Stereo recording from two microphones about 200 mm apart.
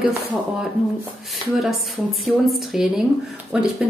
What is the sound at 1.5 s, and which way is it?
A woman's voice, centre (ahead or behind).